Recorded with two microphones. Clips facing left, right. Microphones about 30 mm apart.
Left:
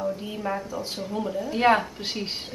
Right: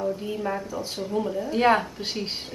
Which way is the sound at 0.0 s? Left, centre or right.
Centre.